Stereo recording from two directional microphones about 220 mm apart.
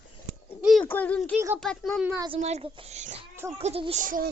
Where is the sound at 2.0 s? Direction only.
10° right (ahead or behind).